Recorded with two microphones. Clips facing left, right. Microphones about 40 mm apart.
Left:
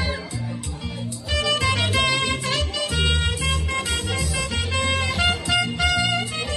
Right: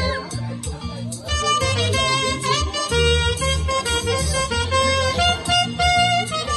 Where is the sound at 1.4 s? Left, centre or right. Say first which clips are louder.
Right 3 dB; left.